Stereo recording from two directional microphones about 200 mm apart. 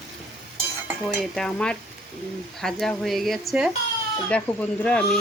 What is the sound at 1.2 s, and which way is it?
Speech, 5° left (ahead or behind).